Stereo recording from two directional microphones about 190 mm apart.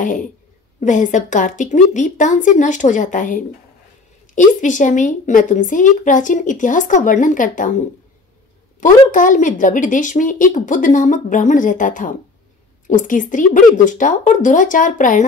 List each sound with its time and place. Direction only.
0.0 s a woman's voice: 45° left (ahead or behind)
9.1 s a woman's voice: 45° left (ahead or behind)